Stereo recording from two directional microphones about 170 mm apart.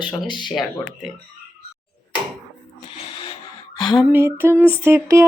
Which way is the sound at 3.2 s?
30° left (ahead or behind).